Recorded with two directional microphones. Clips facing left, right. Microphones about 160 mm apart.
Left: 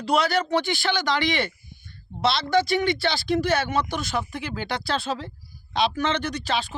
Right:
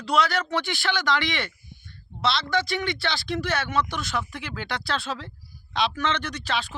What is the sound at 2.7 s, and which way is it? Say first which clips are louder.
Speech: left 5 dB; 35° left (ahead or behind).